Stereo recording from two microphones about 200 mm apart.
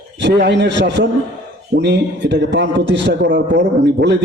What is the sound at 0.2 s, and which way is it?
A man's voice, 60° right (ahead or behind).